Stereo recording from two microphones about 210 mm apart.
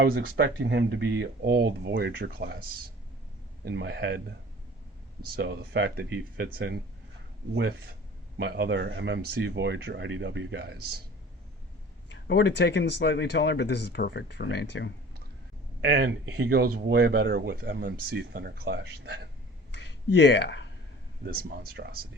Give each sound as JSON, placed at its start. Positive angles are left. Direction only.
{"t": 0.0, "sound": "speech", "side_deg": -50}
{"t": 5.2, "sound": "speech", "side_deg": -50}
{"t": 8.4, "sound": "speech", "side_deg": -50}
{"t": 12.1, "sound": "speech", "side_deg": 55}
{"t": 15.8, "sound": "speech", "side_deg": -55}
{"t": 20.1, "sound": "speech", "side_deg": 55}
{"t": 21.2, "sound": "speech", "side_deg": -45}